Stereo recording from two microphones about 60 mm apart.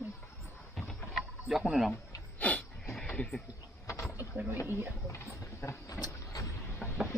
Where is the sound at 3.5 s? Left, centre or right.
Left.